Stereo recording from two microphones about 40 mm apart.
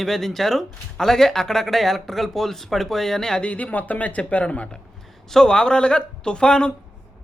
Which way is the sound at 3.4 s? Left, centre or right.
Left.